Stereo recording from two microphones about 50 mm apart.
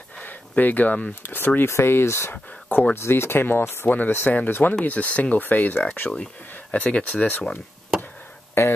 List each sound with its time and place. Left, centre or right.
0.2 s a sound: left
1.2 s speech: left
1.7 s speech: left
2.3 s speech: left
2.9 s speech: left
3.9 s speech: left
4.8 s speech: left
6.7 s speech: left
8.6 s speech: left